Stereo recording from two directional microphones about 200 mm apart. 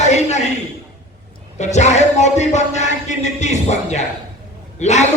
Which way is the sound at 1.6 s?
35° left (ahead or behind).